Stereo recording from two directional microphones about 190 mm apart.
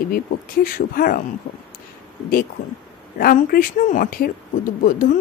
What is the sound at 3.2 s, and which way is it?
Speech, 50° left (ahead or behind).